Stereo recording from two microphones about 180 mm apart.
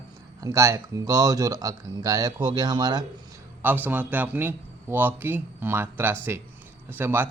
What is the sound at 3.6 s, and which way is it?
A man's voice, 10° right (ahead or behind).